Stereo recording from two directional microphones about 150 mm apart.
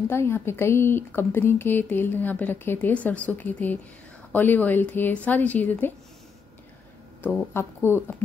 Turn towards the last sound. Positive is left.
turn(degrees=15)  # may be behind; listen again after turning